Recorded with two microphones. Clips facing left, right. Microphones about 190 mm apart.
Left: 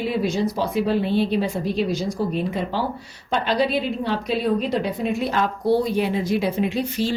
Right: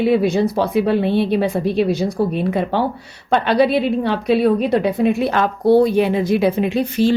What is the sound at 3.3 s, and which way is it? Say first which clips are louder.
A woman's voice: right 6 dB; 65° right (ahead or behind).